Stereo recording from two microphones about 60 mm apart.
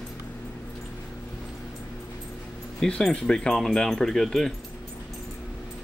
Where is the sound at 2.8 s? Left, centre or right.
Centre.